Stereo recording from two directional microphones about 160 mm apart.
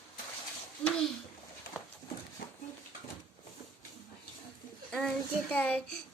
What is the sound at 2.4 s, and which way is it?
Dog, 80° left.